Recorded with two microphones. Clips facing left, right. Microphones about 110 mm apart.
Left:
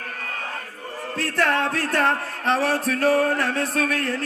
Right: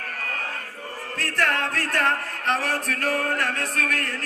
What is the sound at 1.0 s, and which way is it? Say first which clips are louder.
A man's voice: left 3 dB; 15° left (ahead or behind).